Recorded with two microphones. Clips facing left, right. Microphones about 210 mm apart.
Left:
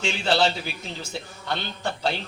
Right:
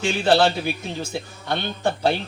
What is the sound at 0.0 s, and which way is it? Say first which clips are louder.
A man's voice: right 5 dB; 55° right (ahead or behind).